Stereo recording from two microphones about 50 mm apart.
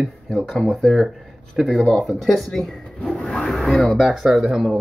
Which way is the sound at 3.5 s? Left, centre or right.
Centre.